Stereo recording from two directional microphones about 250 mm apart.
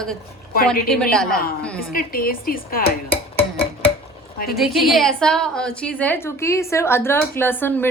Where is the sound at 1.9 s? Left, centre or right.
Left.